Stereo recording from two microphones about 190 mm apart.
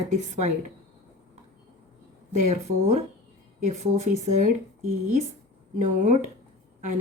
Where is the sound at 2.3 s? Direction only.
35° right (ahead or behind).